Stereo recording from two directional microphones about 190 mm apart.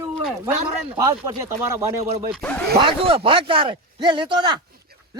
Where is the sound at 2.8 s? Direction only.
25° right (ahead or behind).